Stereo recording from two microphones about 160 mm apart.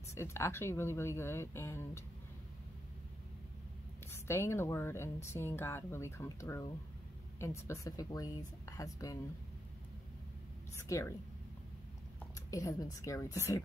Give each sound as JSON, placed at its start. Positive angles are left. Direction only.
{"t": 0.1, "sound": "speech", "side_deg": 15}
{"t": 4.1, "sound": "speech", "side_deg": 15}
{"t": 10.8, "sound": "speech", "side_deg": 20}
{"t": 12.4, "sound": "speech", "side_deg": 20}